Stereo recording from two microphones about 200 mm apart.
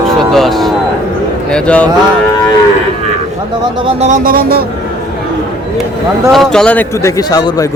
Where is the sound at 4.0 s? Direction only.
40° right (ahead or behind).